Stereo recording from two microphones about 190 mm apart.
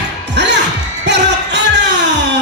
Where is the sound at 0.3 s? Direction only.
65° right (ahead or behind).